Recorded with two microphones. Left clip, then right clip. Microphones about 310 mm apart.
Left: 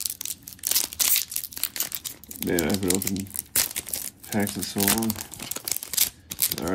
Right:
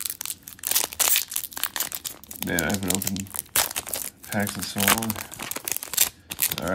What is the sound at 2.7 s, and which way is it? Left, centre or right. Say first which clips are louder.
Speech: left 2 dB; centre.